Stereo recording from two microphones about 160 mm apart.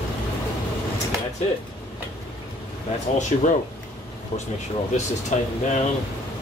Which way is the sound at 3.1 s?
45° left (ahead or behind).